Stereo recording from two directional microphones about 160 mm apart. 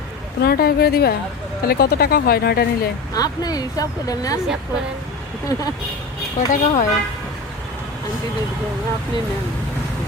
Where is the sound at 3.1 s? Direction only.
25° left (ahead or behind).